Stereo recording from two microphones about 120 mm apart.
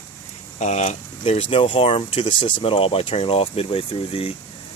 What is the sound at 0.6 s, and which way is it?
Speech, 70° left (ahead or behind).